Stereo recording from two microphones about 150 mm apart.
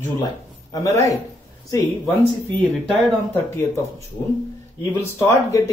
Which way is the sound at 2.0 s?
10° left (ahead or behind).